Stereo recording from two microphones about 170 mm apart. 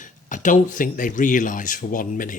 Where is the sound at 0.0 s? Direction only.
50° left (ahead or behind).